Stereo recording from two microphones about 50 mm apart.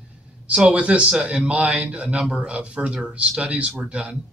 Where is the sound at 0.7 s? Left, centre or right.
Right.